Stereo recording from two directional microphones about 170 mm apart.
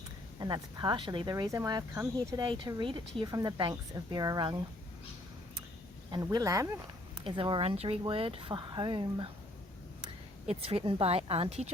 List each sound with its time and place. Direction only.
0.3 s speech: 25° right (ahead or behind)
6.1 s speech: 25° right (ahead or behind)
10.4 s speech: 35° right (ahead or behind)